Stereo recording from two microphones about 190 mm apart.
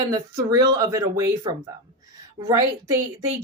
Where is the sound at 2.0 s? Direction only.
20° right (ahead or behind).